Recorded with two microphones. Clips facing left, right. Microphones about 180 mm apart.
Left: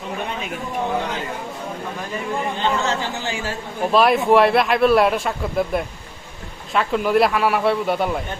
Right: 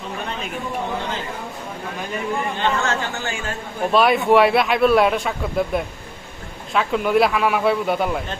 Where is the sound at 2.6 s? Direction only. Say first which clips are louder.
Even; 20° left (ahead or behind).